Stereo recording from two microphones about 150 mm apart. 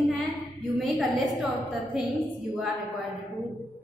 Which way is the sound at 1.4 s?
10° right (ahead or behind).